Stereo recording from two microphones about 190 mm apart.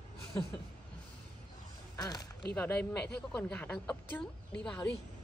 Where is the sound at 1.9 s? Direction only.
20° left (ahead or behind).